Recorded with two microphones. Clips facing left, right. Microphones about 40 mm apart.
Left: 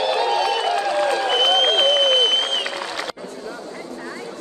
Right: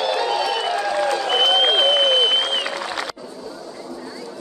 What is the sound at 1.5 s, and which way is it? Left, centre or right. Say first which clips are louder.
Applause: right 1 dB; centre.